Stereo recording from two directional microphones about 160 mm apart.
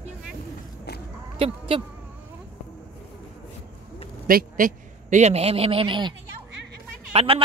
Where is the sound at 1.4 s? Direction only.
35° right (ahead or behind).